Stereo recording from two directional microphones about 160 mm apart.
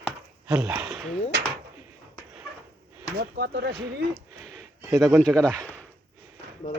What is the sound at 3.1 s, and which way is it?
Speech, 80° right.